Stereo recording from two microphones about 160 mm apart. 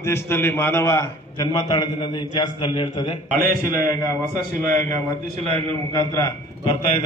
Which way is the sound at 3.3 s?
65° right (ahead or behind).